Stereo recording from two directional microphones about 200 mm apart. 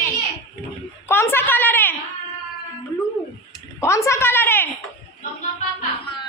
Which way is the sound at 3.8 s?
15° left (ahead or behind).